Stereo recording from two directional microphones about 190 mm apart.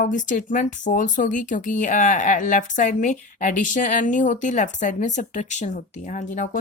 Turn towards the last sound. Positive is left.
turn(degrees=40)  # may be behind; listen again after turning